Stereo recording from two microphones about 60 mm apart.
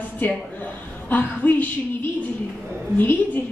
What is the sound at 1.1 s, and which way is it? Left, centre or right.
Speech, left.